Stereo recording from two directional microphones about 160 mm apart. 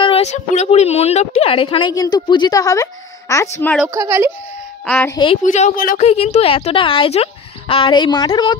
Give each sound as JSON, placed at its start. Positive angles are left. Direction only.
{"t": 0.0, "sound": "a woman's voice", "side_deg": 40}
{"t": 3.9, "sound": "speech", "side_deg": -20}
{"t": 4.8, "sound": "a woman's voice", "side_deg": 10}
{"t": 5.1, "sound": "a woman's voice", "side_deg": 30}
{"t": 5.4, "sound": "speech", "side_deg": 50}
{"t": 6.0, "sound": "a woman's voice", "side_deg": 40}